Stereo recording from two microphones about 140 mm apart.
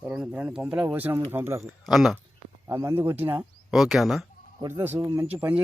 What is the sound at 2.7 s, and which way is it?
Speech, 20° right (ahead or behind).